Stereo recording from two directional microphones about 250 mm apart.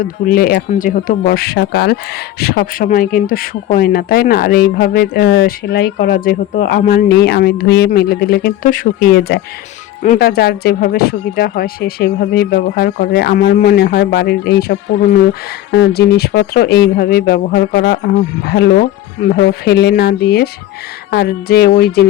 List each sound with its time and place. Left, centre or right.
0.0 s speech: left